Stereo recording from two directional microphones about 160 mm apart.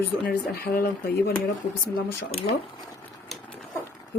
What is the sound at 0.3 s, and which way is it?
Speech, 65° left (ahead or behind).